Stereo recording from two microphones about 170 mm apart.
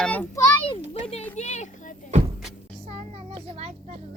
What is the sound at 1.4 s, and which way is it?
Speech, 40° left (ahead or behind).